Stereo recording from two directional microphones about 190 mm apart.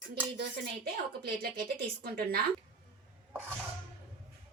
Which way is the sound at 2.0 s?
50° right (ahead or behind).